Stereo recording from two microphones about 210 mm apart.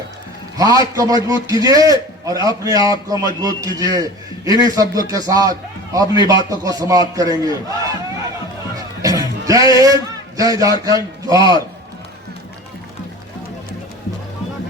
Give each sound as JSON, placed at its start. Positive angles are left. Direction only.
{"t": 0.5, "sound": "a man's voice", "side_deg": -15}
{"t": 8.7, "sound": "music", "side_deg": -15}
{"t": 9.5, "sound": "a man's voice", "side_deg": -15}